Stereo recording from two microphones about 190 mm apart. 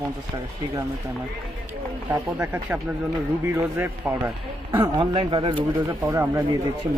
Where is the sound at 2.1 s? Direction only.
15° right (ahead or behind).